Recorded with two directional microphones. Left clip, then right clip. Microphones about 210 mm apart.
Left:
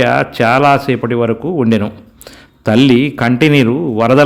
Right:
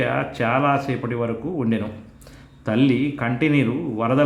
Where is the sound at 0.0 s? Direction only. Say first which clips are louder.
Left 11 dB; 45° left (ahead or behind).